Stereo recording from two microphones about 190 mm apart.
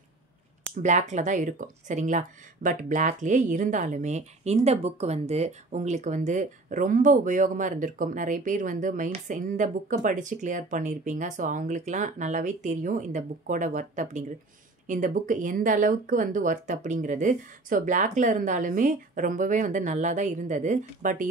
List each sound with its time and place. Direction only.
0.8 s speech: 40° right (ahead or behind)